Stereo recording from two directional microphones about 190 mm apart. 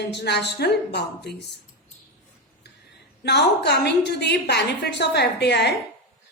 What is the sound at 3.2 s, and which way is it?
A woman's voice, 60° left (ahead or behind).